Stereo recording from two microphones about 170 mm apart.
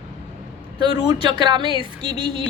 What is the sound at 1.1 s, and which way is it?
Speech, 25° right (ahead or behind).